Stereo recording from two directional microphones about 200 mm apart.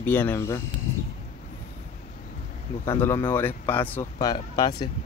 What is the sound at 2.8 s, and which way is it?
Speech, 10° left (ahead or behind).